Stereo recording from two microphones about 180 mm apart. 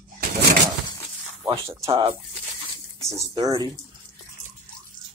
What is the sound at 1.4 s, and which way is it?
Speech, 15° right (ahead or behind).